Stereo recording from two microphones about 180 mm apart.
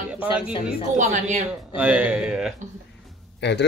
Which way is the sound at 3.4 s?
70° left (ahead or behind).